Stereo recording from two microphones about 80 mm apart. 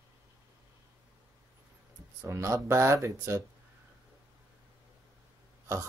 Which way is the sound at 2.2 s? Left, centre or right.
Right.